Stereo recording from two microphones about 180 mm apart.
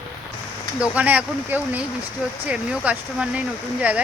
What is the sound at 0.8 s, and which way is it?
Speech, 10° right (ahead or behind).